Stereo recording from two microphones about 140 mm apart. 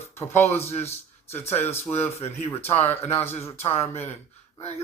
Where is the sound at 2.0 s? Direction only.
45° left (ahead or behind).